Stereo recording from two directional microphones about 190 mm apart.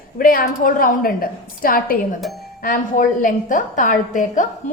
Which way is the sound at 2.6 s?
45° left (ahead or behind).